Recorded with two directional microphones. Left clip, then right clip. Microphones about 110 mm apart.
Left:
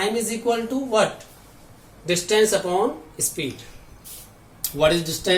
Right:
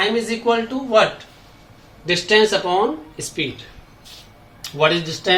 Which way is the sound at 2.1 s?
55° right (ahead or behind).